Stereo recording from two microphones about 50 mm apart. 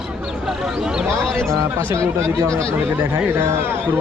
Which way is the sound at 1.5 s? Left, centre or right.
Right.